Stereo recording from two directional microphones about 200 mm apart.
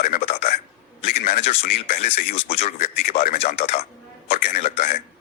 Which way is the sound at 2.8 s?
45° left (ahead or behind).